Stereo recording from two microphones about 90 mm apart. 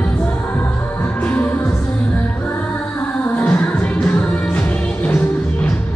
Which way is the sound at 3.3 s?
25° left (ahead or behind).